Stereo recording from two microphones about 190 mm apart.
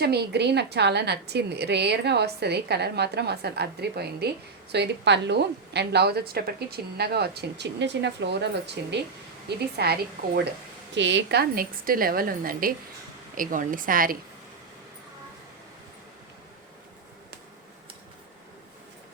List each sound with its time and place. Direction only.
0.0 s a woman's voice: 60° right (ahead or behind)
10.9 s a woman's voice: 70° right (ahead or behind); by 14.2 s 50° right (ahead or behind)